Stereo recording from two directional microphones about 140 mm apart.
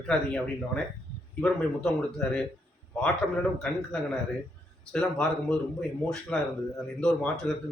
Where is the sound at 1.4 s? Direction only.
5° left (ahead or behind).